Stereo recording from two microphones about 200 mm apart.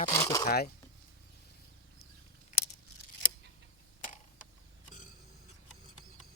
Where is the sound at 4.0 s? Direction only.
40° left (ahead or behind).